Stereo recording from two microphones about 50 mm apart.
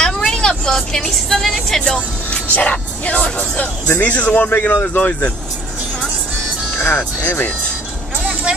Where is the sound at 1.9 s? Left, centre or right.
Left.